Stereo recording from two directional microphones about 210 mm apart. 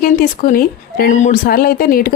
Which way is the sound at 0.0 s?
45° left (ahead or behind).